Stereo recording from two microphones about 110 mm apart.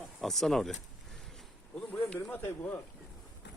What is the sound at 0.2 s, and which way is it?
Speech, centre (ahead or behind).